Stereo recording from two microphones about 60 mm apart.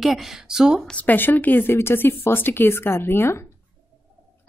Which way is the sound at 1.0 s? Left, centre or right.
Left.